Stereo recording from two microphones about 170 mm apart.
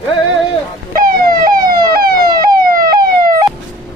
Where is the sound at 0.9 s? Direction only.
55° right (ahead or behind).